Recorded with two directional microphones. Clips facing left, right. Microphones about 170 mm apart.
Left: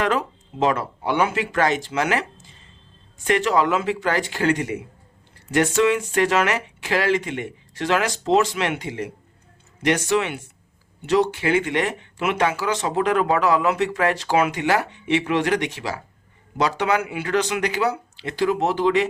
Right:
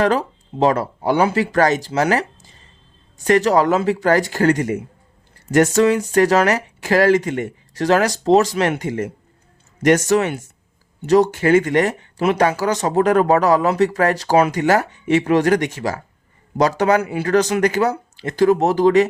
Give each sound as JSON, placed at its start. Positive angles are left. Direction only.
{"t": 0.0, "sound": "speech", "side_deg": -35}